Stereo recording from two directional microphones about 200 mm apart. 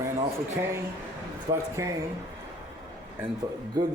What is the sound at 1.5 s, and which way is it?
Speech, 15° right (ahead or behind).